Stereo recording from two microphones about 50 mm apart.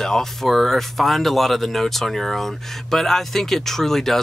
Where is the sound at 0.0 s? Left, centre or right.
Centre.